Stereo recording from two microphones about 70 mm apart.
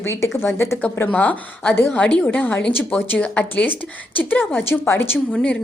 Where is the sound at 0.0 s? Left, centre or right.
Left.